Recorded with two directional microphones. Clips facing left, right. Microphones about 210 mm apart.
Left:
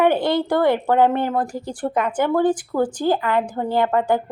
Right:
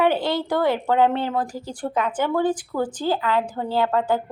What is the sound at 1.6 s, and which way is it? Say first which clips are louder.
A woman's voice: left 2 dB; 10° left (ahead or behind).